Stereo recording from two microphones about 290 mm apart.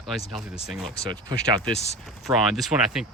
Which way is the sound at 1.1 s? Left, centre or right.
Centre.